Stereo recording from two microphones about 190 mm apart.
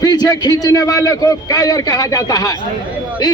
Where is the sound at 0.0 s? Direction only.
20° left (ahead or behind).